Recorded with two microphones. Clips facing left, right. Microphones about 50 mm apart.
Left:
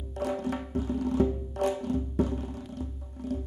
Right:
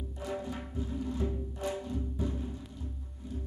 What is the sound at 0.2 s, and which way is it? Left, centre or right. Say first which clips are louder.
Music: left 7 dB; left.